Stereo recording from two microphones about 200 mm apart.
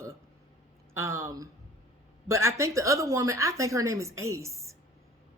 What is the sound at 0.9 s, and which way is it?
A woman's voice, 15° right (ahead or behind).